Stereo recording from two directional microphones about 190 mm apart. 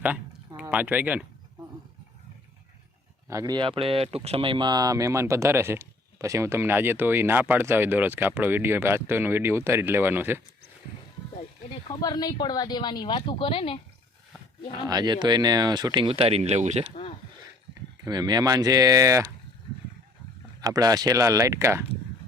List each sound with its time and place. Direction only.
0.0 s a sound: 10° right (ahead or behind)
3.2 s speech: 20° right (ahead or behind)
11.7 s speech: 25° left (ahead or behind)
14.8 s speech: 20° right (ahead or behind); by 16.9 s 35° right (ahead or behind)
18.0 s speech: 20° right (ahead or behind)
20.6 s speech: 20° right (ahead or behind)